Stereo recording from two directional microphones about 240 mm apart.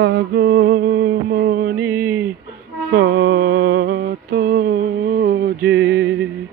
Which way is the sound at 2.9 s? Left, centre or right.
Right.